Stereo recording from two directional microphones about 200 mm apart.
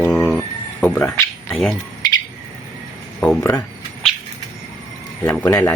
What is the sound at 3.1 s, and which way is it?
Speech, 5° left (ahead or behind).